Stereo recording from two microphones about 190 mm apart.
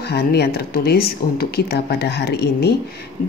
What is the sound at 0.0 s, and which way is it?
Speech, 60° left (ahead or behind).